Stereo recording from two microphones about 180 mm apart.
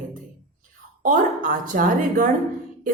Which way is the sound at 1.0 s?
50° right (ahead or behind).